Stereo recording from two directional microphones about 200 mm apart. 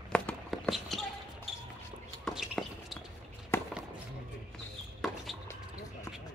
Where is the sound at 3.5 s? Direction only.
10° left (ahead or behind).